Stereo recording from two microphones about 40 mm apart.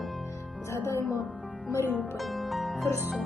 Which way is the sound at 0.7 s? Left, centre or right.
Left.